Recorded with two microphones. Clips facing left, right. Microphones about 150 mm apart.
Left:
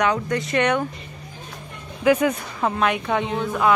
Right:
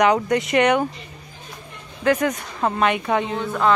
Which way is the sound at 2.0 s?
10° left (ahead or behind).